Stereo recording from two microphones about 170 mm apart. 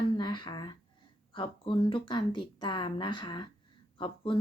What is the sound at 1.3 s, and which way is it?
Speech, 30° left (ahead or behind).